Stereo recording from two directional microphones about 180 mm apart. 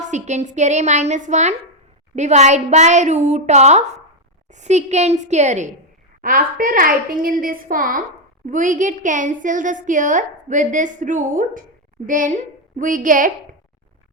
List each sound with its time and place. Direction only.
0.0 s a woman's voice: 40° right (ahead or behind)
6.2 s a woman's voice: 50° right (ahead or behind)